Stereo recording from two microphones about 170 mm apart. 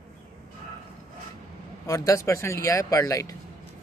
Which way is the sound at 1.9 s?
20° left (ahead or behind).